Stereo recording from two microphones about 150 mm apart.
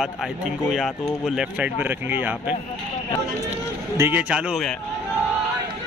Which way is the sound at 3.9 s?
20° right (ahead or behind).